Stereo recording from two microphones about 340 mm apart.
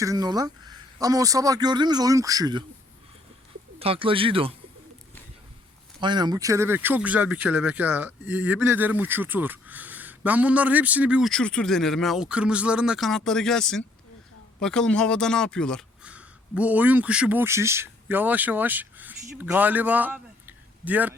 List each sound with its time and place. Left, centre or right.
0.0 s speech: centre
3.8 s speech: centre
6.0 s speech: centre